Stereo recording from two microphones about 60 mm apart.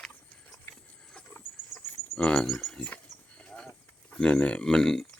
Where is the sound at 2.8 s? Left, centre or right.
Centre.